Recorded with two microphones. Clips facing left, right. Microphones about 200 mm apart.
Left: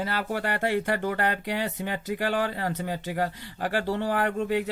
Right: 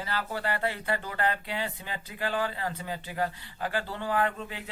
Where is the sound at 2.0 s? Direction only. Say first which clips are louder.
Left 3 dB; 75° left (ahead or behind).